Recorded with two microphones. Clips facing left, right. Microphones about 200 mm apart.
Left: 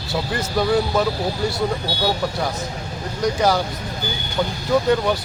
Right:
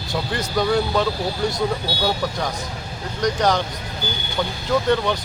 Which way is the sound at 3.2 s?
5° left (ahead or behind).